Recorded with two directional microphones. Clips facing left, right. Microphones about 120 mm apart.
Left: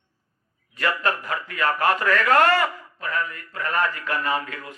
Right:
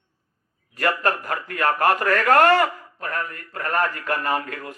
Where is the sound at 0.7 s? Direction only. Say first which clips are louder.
Right 2 dB; 45° right (ahead or behind).